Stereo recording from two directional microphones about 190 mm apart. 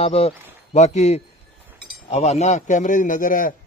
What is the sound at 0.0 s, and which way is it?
A man's voice, 35° left (ahead or behind).